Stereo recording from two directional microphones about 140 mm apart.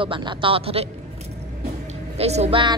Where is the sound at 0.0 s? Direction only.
35° right (ahead or behind).